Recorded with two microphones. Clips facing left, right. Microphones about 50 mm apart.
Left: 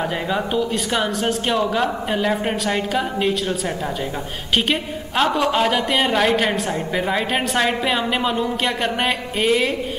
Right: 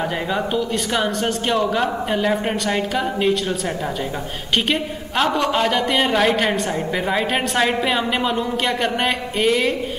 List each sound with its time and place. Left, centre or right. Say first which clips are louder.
0.3 s a man's voice: left 1 dB; centre
4.6 s a man's voice: even; centre